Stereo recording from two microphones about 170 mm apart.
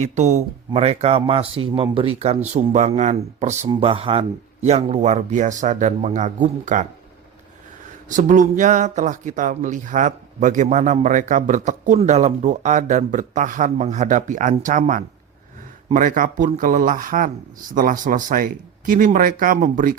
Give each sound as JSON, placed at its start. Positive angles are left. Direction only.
{"t": 0.0, "sound": "speech", "side_deg": -40}
{"t": 3.7, "sound": "speech", "side_deg": -30}
{"t": 8.1, "sound": "speech", "side_deg": -50}